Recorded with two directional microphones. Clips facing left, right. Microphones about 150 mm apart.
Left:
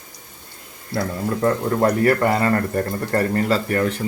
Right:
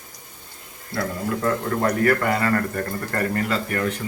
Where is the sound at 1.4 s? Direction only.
30° left (ahead or behind).